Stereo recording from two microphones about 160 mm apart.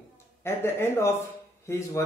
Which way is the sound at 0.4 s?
15° left (ahead or behind).